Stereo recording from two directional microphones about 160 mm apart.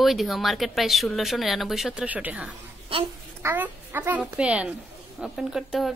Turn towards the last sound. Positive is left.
turn(degrees=0)  # may be behind; listen again after turning